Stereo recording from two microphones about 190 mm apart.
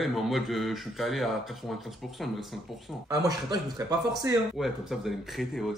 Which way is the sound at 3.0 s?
20° right (ahead or behind).